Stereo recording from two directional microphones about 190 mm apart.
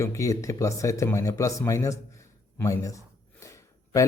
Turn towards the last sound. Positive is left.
turn(degrees=15)  # may be behind; listen again after turning